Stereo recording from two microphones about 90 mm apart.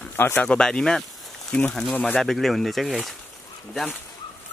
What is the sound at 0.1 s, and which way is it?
Speech, 25° left (ahead or behind).